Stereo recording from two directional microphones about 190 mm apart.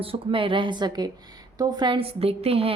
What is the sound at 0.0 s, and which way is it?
A woman's voice, 30° right (ahead or behind).